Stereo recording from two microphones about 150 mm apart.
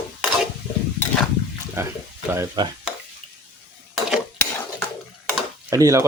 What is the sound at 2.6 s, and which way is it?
Speech, 30° right (ahead or behind).